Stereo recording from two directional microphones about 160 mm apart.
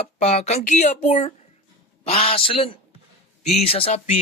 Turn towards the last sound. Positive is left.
turn(degrees=40)  # may be behind; listen again after turning